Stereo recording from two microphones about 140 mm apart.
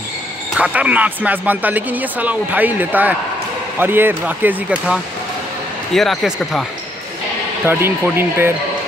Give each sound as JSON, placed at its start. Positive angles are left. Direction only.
{"t": 0.6, "sound": "speech", "side_deg": -10}
{"t": 7.6, "sound": "speech", "side_deg": -15}